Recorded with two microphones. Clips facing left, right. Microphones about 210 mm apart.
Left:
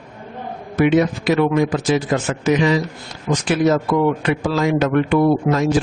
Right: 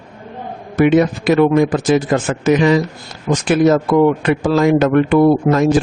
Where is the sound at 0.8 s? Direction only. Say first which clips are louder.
Right 3 dB; 50° right (ahead or behind).